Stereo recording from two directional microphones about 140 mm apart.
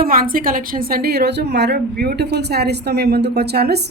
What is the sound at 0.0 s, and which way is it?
A woman's voice, 90° right.